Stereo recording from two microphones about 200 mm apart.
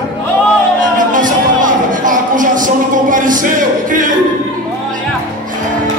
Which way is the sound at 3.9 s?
40° right (ahead or behind).